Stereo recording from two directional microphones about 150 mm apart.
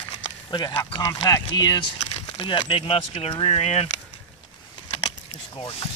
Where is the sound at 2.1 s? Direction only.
40° left (ahead or behind).